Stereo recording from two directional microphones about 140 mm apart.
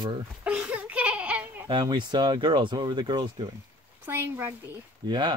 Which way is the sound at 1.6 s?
35° right (ahead or behind).